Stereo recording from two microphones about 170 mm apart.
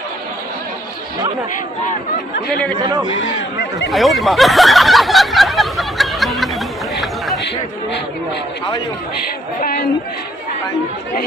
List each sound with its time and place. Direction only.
2.5 s speech: 10° left (ahead or behind)
2.7 s a man's voice: 30° right (ahead or behind)
3.9 s a sound: centre (ahead or behind)
9.6 s a woman's voice: 55° left (ahead or behind)